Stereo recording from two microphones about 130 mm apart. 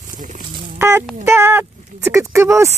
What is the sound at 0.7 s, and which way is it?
Speech, 20° right (ahead or behind).